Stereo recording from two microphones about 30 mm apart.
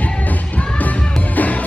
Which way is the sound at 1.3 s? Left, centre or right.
Left.